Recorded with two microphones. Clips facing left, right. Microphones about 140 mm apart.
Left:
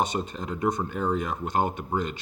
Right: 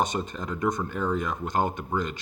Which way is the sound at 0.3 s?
45° right (ahead or behind).